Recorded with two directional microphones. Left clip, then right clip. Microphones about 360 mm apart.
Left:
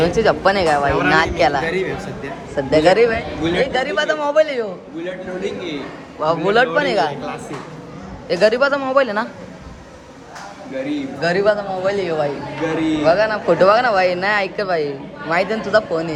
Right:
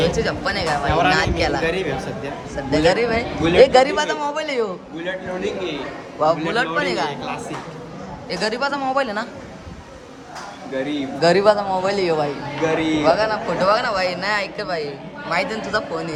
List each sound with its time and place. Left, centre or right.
0.2 s speech: centre
3.4 s speech: centre
6.1 s speech: centre
11.2 s a man's voice: centre
12.6 s a man's voice: right
13.1 s speech: centre